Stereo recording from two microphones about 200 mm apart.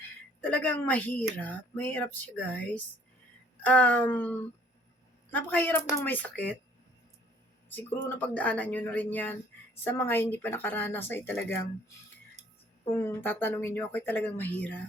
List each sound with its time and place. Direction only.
0.5 s speech: 10° left (ahead or behind)
8.1 s speech: 10° left (ahead or behind)
12.9 s speech: 10° left (ahead or behind)